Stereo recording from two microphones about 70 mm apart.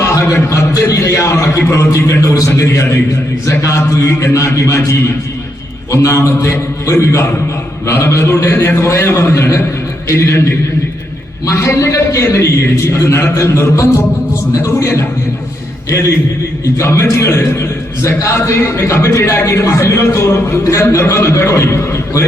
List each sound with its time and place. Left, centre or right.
0.0 s a man's voice: left
11.4 s a man's voice: left
16.8 s a man's voice: left